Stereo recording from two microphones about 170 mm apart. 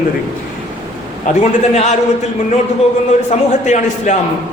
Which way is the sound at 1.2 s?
40° left (ahead or behind).